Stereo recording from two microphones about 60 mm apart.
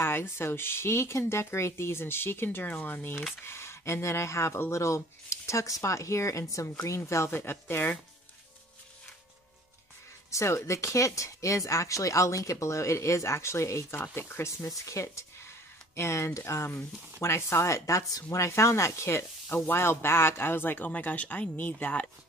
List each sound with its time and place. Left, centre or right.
0.0 s speech: left
3.4 s speech: left
7.2 s speech: left
10.3 s speech: left
13.9 s speech: left
14.6 s speech: left